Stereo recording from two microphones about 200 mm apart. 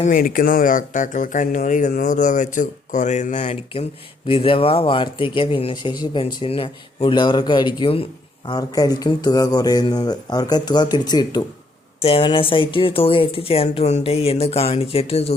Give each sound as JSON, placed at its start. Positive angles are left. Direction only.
{"t": 0.0, "sound": "speech", "side_deg": 45}